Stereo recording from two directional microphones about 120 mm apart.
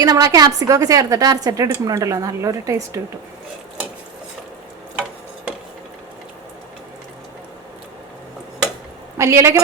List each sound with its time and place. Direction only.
0.0 s a woman's voice: 30° right (ahead or behind)
9.1 s a woman's voice: 25° right (ahead or behind)